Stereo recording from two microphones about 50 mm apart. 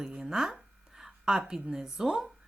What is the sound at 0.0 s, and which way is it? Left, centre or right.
A woman's voice, centre.